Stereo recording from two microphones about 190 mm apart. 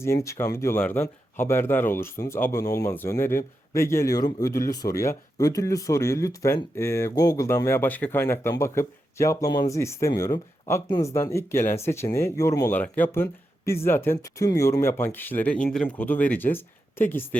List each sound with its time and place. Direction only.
0.3 s speech: 15° left (ahead or behind)